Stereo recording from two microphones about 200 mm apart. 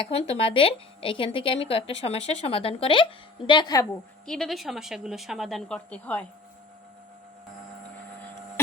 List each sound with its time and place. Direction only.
0.3 s speech: 25° left (ahead or behind)
4.3 s a woman's voice: centre (ahead or behind)